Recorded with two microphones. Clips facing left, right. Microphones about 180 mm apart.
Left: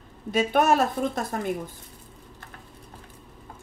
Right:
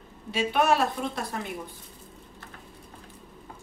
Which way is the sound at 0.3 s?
45° left (ahead or behind).